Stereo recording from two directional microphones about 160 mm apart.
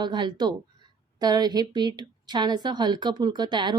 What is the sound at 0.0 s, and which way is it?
Speech, 25° right (ahead or behind).